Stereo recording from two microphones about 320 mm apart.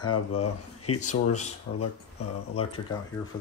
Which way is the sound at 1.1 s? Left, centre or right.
Left.